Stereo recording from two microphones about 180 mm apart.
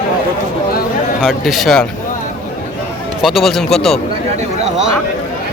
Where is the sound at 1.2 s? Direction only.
Centre (ahead or behind).